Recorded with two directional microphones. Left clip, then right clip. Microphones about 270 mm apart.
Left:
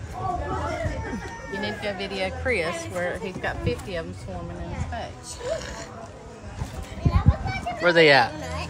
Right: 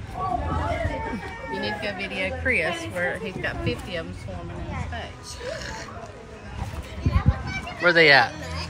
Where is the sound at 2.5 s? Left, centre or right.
Left.